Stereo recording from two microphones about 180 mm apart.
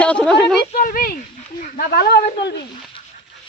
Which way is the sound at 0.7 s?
50° left (ahead or behind).